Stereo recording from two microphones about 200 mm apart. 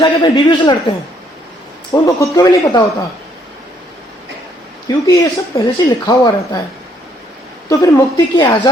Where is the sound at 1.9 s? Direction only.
15° left (ahead or behind).